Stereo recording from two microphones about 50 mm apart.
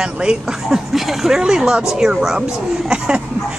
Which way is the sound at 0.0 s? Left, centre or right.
Centre.